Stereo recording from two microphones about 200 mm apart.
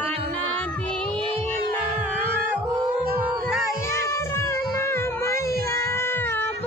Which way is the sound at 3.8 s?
15° left (ahead or behind).